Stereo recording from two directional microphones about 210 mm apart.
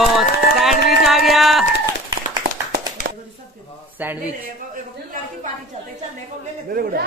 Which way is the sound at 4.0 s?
10° right (ahead or behind).